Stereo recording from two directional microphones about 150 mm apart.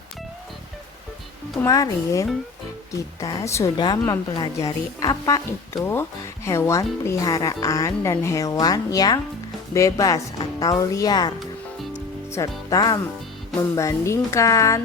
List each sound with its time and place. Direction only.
1.6 s speech: 20° left (ahead or behind)
12.4 s speech: 20° left (ahead or behind)